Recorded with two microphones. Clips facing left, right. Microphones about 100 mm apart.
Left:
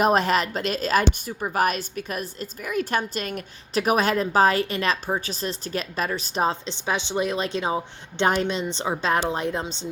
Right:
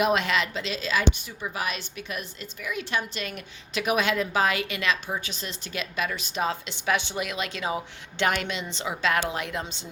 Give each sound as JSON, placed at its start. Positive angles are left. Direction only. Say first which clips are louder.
{"t": 0.0, "sound": "a woman's voice", "louder": "left 4 dB", "side_deg": 40}
{"t": 6.8, "sound": "a woman's voice", "louder": "left 2 dB", "side_deg": 25}